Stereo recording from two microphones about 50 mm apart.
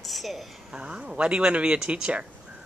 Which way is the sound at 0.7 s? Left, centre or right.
Right.